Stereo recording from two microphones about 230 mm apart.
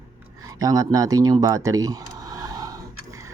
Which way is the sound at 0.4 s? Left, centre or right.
Centre.